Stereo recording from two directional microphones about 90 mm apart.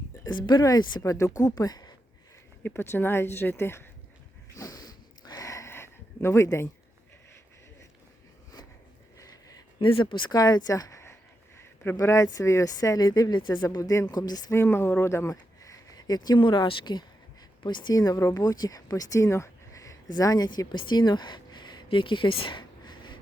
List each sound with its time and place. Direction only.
0.3 s speech: 60° left (ahead or behind)
0.6 s speech: 50° left (ahead or behind)
1.0 s speech: 35° left (ahead or behind)
2.6 s speech: 25° left (ahead or behind)
4.5 s a sound: 40° left (ahead or behind)
9.1 s a sound: 40° left (ahead or behind)
9.8 s speech: 70° left (ahead or behind); by 13.4 s 45° left (ahead or behind)
13.4 s speech: 60° left (ahead or behind)
13.7 s speech: 40° left (ahead or behind)
14.5 s speech: 25° left (ahead or behind); by 23.1 s 60° left (ahead or behind)